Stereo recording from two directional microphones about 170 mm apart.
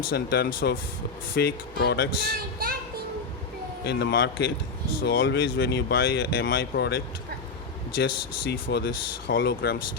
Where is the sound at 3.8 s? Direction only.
75° left (ahead or behind).